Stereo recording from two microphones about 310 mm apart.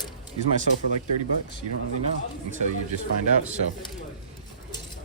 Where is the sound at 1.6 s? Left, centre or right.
Right.